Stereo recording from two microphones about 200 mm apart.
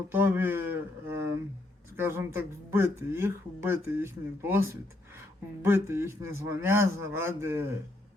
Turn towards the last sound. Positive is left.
turn(degrees=-10)  # may be behind; listen again after turning